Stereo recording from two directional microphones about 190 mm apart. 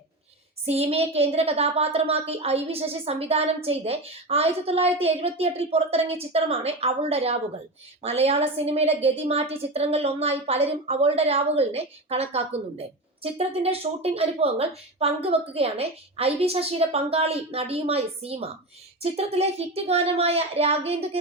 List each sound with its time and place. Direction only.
0.6 s a woman's voice: 35° right (ahead or behind)